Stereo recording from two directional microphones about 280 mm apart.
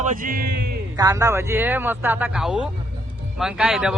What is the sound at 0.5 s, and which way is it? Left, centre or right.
Music, right.